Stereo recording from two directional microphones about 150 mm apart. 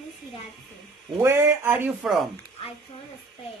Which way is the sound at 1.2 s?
15° right (ahead or behind).